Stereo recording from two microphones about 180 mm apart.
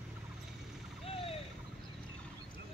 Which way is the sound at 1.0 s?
30° left (ahead or behind).